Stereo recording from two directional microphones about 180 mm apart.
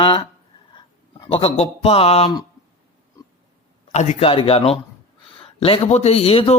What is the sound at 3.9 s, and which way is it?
A man's voice, 40° left (ahead or behind).